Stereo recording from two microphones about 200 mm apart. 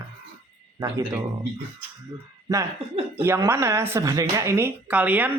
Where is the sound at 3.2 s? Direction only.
10° right (ahead or behind).